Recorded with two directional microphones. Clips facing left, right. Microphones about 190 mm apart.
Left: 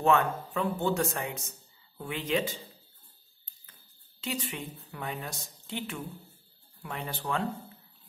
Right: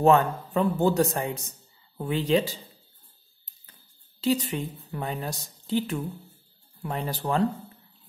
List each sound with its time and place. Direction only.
0.0 s speech: 35° right (ahead or behind)
4.2 s speech: 35° right (ahead or behind)